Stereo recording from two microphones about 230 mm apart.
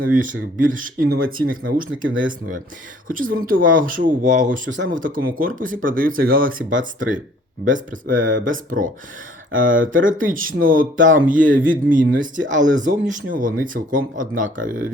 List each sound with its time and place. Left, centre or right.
0.0 s speech: right
3.1 s speech: right
8.3 s speech: right
10.1 s speech: right